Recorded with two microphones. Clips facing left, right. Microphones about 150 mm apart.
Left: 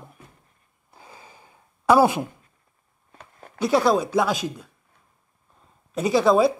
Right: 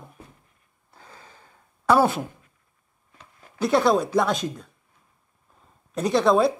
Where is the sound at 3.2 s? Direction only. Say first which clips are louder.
Left 5 dB; 55° left (ahead or behind).